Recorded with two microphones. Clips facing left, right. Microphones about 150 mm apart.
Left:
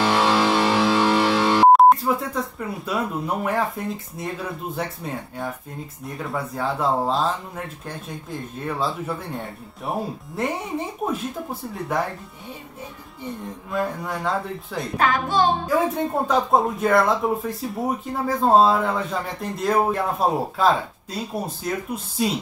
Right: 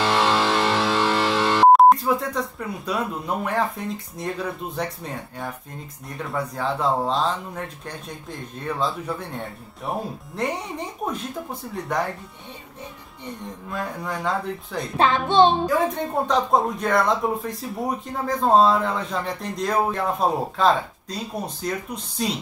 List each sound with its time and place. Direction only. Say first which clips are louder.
0.0 s music: left 1 dB; 10° left (ahead or behind)
1.7 s speech: right 1 dB; centre (ahead or behind)
11.0 s speech: left 2 dB; centre (ahead or behind)
13.7 s speech: left 4 dB; centre (ahead or behind)
15.0 s speech: right 4 dB; 25° right (ahead or behind)
15.6 s speech: left 1 dB; 5° left (ahead or behind)